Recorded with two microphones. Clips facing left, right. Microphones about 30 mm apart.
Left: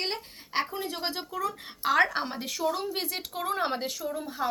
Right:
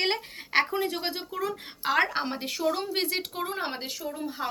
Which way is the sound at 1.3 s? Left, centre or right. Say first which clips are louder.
Right 1 dB; right.